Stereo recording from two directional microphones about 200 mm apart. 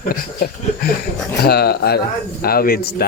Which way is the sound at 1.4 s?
50° left (ahead or behind).